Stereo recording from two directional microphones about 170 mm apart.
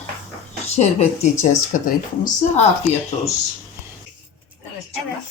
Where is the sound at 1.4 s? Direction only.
50° left (ahead or behind).